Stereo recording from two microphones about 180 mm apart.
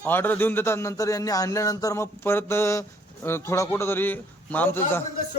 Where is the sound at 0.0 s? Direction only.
10° left (ahead or behind).